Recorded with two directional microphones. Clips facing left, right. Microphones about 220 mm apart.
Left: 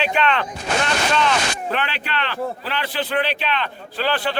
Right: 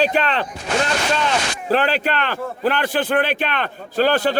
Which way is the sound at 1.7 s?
40° right (ahead or behind).